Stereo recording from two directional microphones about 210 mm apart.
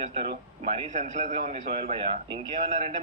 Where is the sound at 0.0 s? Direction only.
25° right (ahead or behind).